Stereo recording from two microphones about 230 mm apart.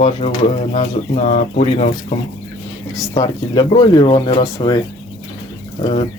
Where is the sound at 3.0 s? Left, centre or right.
Centre.